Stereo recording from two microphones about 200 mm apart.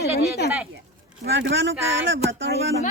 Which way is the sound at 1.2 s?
60° right (ahead or behind).